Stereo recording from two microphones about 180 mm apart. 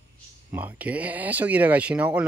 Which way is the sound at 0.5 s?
10° right (ahead or behind).